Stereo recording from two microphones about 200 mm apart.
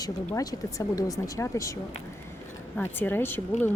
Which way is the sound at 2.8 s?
10° left (ahead or behind).